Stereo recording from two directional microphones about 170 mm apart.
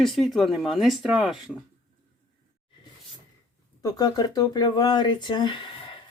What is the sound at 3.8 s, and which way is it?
Speech, 20° left (ahead or behind).